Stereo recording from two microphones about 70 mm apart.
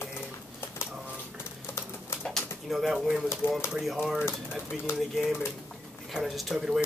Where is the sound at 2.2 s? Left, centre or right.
Centre.